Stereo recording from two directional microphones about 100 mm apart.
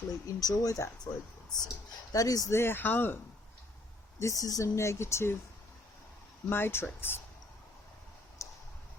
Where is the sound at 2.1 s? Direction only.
35° left (ahead or behind).